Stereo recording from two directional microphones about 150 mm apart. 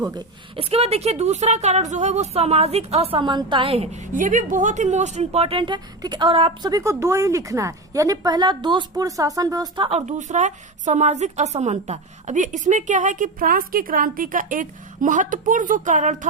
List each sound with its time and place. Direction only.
0.0 s a woman's voice: 25° right (ahead or behind)
0.5 s speech: 40° right (ahead or behind)
6.7 s a woman's voice: 20° right (ahead or behind)
10.1 s a woman's voice: 55° right (ahead or behind)